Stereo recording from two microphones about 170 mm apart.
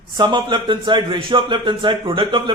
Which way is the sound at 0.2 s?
25° right (ahead or behind).